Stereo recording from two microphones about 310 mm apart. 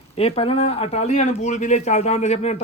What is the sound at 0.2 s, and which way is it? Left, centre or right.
Speech, centre.